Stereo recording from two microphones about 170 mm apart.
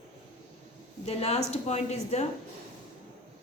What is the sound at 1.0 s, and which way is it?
Speech, 40° left (ahead or behind).